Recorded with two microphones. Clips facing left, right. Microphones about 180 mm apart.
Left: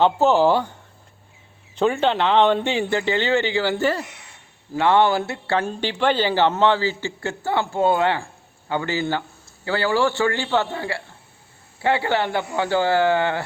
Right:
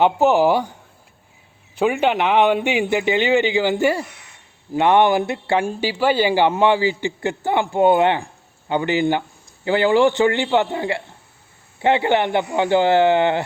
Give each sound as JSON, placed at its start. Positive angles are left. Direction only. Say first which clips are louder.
{"t": 0.0, "sound": "speech", "louder": "right 1 dB", "side_deg": -15}
{"t": 1.7, "sound": "speech", "louder": "right 1 dB", "side_deg": -10}